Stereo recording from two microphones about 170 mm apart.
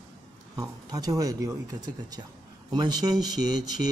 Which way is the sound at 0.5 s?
20° right (ahead or behind).